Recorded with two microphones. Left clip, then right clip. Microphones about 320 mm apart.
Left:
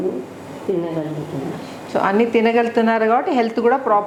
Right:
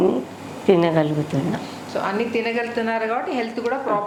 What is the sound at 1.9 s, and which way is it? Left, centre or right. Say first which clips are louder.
A woman's voice: left 7 dB; left.